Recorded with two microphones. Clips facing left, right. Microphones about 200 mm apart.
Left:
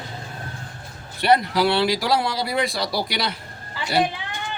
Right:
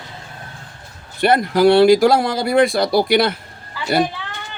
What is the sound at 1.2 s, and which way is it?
Speech, 50° right (ahead or behind).